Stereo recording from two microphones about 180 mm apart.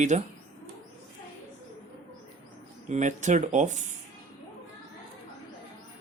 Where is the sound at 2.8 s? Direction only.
40° right (ahead or behind).